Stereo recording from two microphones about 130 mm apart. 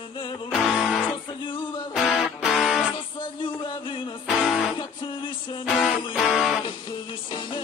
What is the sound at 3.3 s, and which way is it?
Music, 40° left (ahead or behind).